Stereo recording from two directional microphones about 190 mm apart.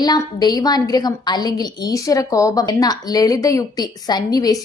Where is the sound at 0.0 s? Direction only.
20° left (ahead or behind).